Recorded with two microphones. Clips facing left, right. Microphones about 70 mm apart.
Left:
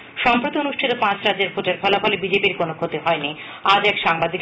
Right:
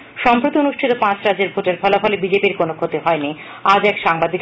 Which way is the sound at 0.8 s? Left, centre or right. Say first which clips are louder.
Right 5 dB; centre.